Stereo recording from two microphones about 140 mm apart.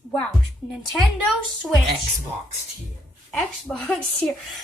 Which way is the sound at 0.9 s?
Centre (ahead or behind).